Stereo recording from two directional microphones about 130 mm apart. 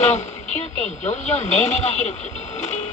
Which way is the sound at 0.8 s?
60° left (ahead or behind).